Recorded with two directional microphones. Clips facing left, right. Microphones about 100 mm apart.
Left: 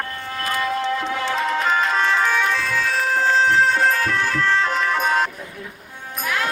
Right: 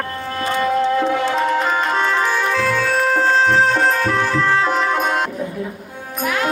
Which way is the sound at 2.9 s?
35° right (ahead or behind).